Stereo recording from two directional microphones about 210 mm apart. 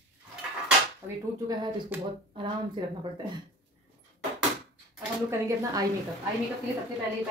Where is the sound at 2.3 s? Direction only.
25° right (ahead or behind).